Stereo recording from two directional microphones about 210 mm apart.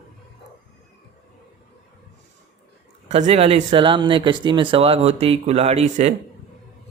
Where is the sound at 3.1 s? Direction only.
30° right (ahead or behind).